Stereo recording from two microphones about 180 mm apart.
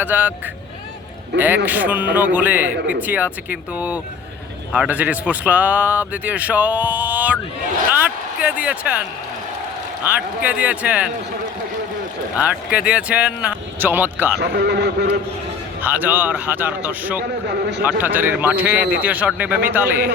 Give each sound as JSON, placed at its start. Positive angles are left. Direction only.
{"t": 0.0, "sound": "speech", "side_deg": -10}
{"t": 1.6, "sound": "speech", "side_deg": -10}
{"t": 10.1, "sound": "speech", "side_deg": -10}
{"t": 12.4, "sound": "speech", "side_deg": -5}
{"t": 14.3, "sound": "a man's voice", "side_deg": -65}
{"t": 15.8, "sound": "speech", "side_deg": -10}
{"t": 17.5, "sound": "a man's voice", "side_deg": -70}
{"t": 18.0, "sound": "speech", "side_deg": -10}